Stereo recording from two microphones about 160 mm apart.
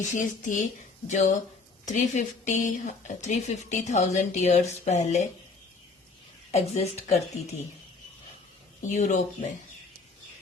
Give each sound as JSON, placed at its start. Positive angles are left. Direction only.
{"t": 0.1, "sound": "a woman's voice", "side_deg": 55}
{"t": 6.5, "sound": "speech", "side_deg": 40}
{"t": 8.9, "sound": "a woman's voice", "side_deg": 50}